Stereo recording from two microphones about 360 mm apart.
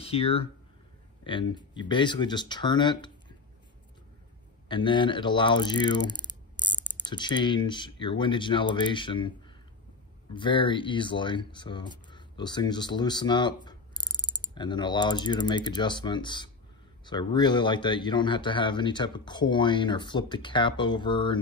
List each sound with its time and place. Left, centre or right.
0.0 s speech: centre
4.6 s speech: centre
10.3 s speech: centre
12.1 s a sound: centre
14.2 s mechanisms: centre
14.5 s speech: centre